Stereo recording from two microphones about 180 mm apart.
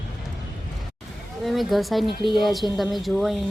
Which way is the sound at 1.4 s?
Centre (ahead or behind).